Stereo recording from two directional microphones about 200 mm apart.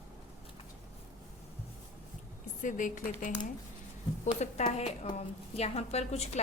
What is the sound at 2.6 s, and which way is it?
Speech, 40° left (ahead or behind).